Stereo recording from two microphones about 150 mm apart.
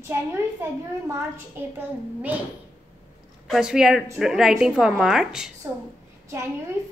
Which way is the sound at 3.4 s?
5° right (ahead or behind).